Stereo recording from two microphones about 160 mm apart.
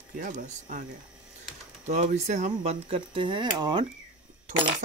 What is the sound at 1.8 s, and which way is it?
Speech, 45° right (ahead or behind).